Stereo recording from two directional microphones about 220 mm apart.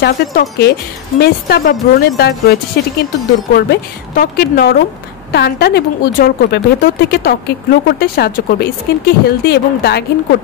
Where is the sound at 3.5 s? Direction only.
45° left (ahead or behind).